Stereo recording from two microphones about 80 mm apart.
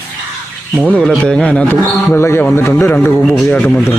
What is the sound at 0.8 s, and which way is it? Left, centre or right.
Speech, centre.